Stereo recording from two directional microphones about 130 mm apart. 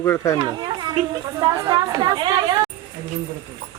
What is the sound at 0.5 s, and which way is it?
Children playing, 35° right (ahead or behind).